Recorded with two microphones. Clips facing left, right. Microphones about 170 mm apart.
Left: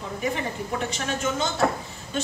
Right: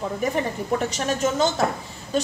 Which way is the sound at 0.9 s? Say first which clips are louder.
Right 4 dB; 40° right (ahead or behind).